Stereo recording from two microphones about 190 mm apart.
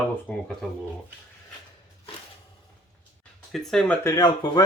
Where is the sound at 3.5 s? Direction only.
Centre (ahead or behind).